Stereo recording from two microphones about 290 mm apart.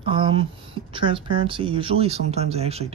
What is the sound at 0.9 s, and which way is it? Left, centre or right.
Speech, centre.